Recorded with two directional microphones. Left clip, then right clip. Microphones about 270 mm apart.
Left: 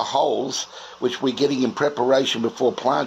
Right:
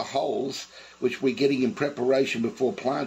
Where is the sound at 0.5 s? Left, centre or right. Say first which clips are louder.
Left 9 dB; left.